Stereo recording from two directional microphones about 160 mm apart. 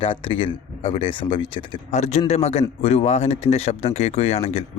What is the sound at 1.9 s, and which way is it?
A man's voice, 40° left (ahead or behind).